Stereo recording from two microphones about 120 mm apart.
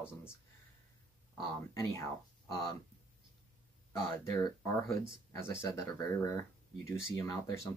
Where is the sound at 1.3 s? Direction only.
25° left (ahead or behind).